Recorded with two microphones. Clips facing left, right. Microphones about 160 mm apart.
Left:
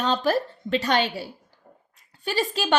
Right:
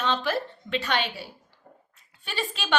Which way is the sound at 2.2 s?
40° left (ahead or behind).